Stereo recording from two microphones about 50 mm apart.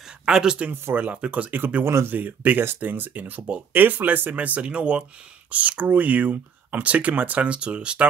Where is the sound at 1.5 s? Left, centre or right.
Right.